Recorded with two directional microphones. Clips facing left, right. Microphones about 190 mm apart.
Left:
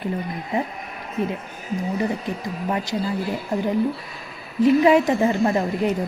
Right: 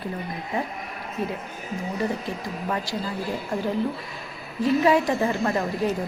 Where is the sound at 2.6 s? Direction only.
20° left (ahead or behind).